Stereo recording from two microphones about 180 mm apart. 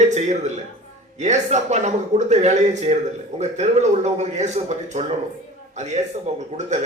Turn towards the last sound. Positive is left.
turn(degrees=-40)  # may be behind; listen again after turning